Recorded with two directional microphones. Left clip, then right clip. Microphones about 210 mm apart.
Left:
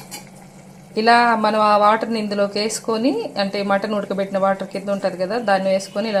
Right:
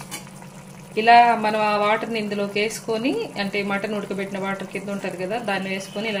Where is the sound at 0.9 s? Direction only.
25° left (ahead or behind).